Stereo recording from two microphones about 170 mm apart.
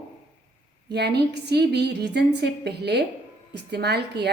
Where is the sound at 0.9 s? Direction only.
75° right (ahead or behind).